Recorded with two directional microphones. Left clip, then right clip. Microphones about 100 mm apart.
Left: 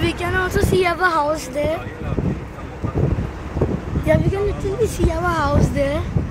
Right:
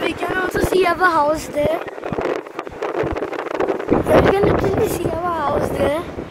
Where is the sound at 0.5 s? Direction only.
30° right (ahead or behind).